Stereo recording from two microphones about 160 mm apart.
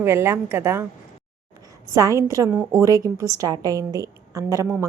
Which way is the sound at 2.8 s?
20° right (ahead or behind).